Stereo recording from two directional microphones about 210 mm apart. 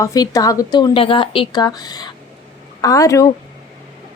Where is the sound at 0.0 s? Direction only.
15° left (ahead or behind).